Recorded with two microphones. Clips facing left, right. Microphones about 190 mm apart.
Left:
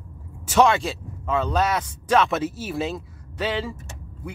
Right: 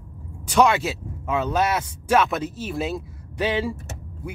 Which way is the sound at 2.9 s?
10° right (ahead or behind).